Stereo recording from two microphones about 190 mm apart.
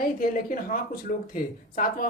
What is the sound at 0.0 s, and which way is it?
Speech, 50° left (ahead or behind).